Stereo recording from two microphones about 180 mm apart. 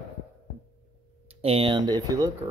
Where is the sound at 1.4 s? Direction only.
30° right (ahead or behind).